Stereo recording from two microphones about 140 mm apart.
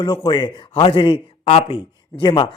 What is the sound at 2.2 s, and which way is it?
Speech, 30° left (ahead or behind).